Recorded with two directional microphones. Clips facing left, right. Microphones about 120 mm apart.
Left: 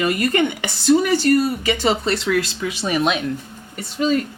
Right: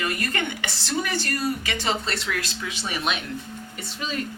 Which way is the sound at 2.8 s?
45° left (ahead or behind).